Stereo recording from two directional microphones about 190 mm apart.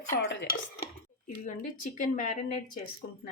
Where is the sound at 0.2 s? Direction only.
65° left (ahead or behind).